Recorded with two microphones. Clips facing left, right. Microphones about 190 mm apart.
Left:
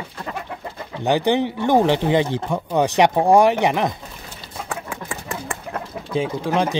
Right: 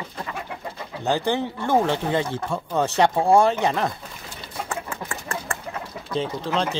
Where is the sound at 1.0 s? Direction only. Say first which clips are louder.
Left 5 dB; 15° left (ahead or behind).